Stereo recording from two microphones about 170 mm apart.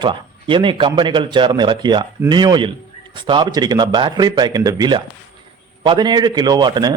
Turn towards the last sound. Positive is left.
turn(degrees=-25)  # may be behind; listen again after turning